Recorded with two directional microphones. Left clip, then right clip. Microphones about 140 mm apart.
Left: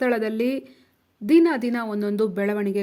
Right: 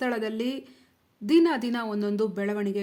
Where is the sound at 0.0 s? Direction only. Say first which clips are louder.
Left 6 dB; 25° left (ahead or behind).